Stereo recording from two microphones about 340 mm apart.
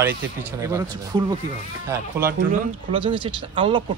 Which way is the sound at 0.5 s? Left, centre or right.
Centre.